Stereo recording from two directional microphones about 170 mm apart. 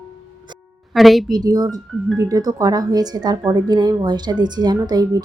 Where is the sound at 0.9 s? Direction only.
Centre (ahead or behind).